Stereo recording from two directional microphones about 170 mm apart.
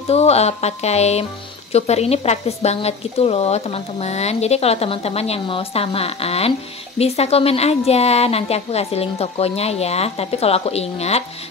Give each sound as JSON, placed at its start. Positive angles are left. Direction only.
{"t": 0.1, "sound": "speech", "side_deg": 40}